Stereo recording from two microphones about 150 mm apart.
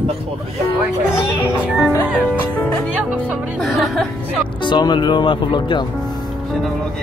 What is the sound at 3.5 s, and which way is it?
Music, centre (ahead or behind).